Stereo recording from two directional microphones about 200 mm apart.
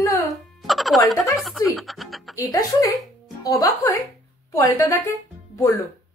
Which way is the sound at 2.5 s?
15° left (ahead or behind).